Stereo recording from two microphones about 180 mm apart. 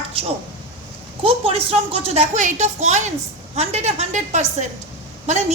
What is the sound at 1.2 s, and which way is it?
A woman's voice, 30° right (ahead or behind).